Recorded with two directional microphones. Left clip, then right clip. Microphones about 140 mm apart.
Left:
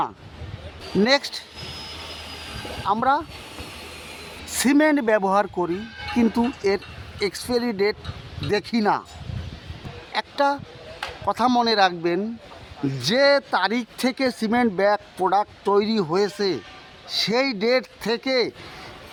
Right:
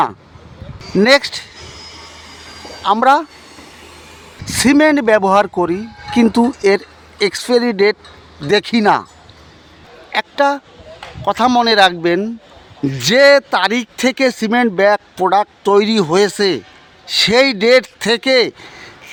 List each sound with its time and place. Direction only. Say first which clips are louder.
1.0 s speech: right 10 dB; 35° right (ahead or behind)
2.8 s speech: right 9 dB; 40° right (ahead or behind)
4.4 s speech: right 8 dB; 30° right (ahead or behind)
10.1 s a sound: right 7 dB; 30° right (ahead or behind)
11.3 s speech: right 8 dB; 30° right (ahead or behind)